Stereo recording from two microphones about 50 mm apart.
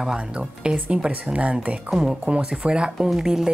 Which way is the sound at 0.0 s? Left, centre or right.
Centre.